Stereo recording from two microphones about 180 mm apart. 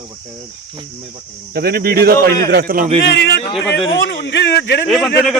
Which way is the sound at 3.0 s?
70° left (ahead or behind).